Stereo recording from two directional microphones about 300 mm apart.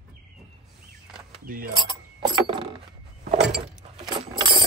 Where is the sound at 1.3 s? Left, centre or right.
Right.